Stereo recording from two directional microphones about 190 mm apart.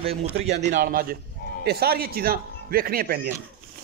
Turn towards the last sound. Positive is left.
turn(degrees=-50)  # may be behind; listen again after turning